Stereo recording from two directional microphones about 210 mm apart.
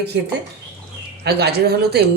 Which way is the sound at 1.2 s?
50° right (ahead or behind).